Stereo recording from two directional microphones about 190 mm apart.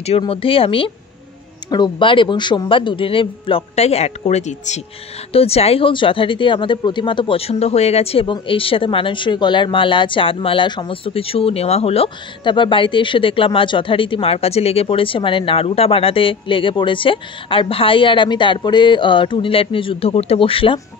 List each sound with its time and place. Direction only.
0.2 s speech: 30° left (ahead or behind)